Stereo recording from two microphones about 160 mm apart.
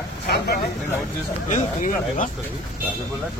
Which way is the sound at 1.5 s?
50° left (ahead or behind).